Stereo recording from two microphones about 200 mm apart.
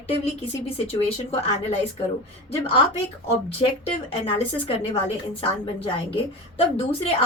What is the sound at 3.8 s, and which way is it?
A woman's voice, 30° left (ahead or behind).